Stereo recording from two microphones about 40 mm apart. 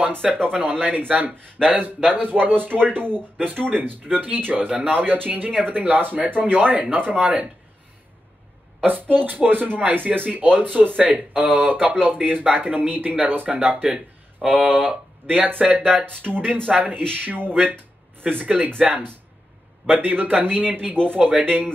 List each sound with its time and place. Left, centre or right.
0.5 s speech: right
4.6 s speech: right
8.8 s speech: right
11.0 s speech: right
14.5 s speech: right
18.4 s speech: right